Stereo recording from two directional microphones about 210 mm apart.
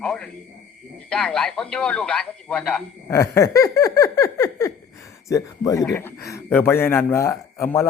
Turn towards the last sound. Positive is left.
turn(degrees=10)  # may be behind; listen again after turning